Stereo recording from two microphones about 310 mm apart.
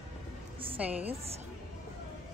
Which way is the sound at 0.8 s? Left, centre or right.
Centre.